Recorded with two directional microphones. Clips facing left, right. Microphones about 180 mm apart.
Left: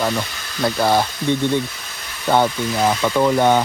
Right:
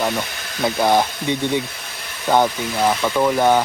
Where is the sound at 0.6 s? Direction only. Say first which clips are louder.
Even; 15° right (ahead or behind).